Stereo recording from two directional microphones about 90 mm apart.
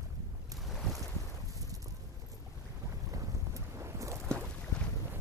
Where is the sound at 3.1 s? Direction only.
35° right (ahead or behind).